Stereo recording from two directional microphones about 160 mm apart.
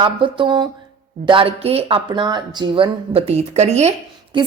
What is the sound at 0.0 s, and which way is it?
A woman's voice, 30° right (ahead or behind).